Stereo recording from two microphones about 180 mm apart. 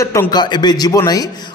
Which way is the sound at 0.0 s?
15° left (ahead or behind).